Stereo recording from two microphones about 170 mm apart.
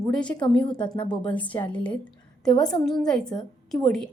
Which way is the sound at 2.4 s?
5° left (ahead or behind).